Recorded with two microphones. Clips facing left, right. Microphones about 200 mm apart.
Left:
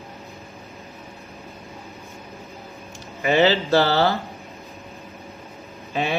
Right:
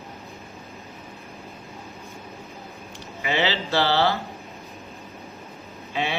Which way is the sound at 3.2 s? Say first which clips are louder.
Left 7 dB; 45° left (ahead or behind).